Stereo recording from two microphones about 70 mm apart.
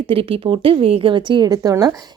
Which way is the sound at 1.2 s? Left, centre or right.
Right.